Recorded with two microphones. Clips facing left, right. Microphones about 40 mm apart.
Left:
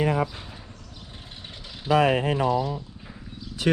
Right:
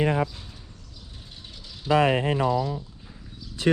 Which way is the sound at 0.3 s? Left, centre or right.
Left.